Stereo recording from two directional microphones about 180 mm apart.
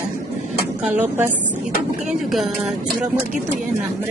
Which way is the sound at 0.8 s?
10° right (ahead or behind).